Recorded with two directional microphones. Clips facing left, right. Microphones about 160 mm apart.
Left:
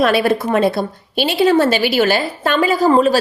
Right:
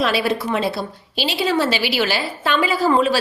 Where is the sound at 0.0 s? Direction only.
55° left (ahead or behind).